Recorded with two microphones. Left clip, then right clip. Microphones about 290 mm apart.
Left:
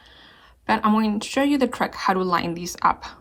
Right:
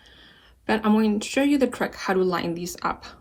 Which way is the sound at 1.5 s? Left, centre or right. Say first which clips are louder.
Left 1 dB; centre.